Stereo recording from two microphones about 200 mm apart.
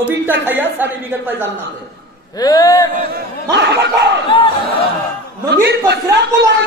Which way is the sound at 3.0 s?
55° right (ahead or behind).